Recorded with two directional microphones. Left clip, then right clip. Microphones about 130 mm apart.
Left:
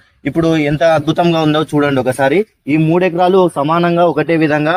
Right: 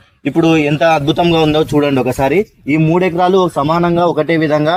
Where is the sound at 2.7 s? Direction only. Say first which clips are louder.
Left 1 dB; 35° right (ahead or behind).